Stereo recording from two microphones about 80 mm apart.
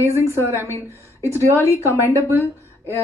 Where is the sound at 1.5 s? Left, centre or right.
Left.